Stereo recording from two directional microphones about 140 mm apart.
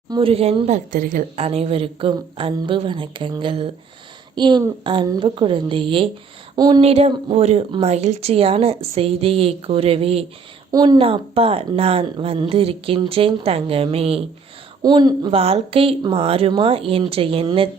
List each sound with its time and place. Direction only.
0.2 s speech: 45° right (ahead or behind)
0.9 s a woman's voice: 90° right
1.4 s speech: 45° right (ahead or behind)
6.8 s speech: 45° right (ahead or behind)
10.7 s speech: 30° right (ahead or behind)
14.8 s speech: 30° right (ahead or behind)